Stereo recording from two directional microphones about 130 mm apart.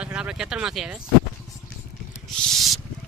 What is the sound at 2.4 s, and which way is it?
Rub, centre (ahead or behind).